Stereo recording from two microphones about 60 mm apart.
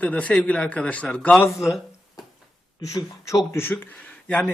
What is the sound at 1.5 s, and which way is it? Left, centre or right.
Speech, left.